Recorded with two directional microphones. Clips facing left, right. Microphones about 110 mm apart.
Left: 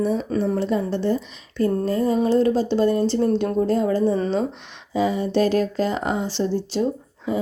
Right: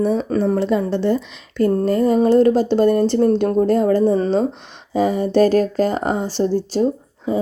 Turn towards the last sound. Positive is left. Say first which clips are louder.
# right 4 dB
turn(degrees=-30)  # may be behind; listen again after turning